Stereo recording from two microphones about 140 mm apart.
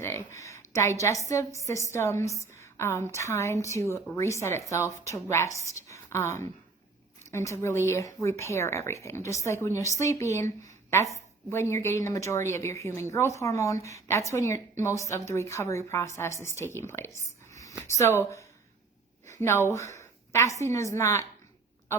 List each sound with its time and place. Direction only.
0.0 s a woman's voice: 20° left (ahead or behind)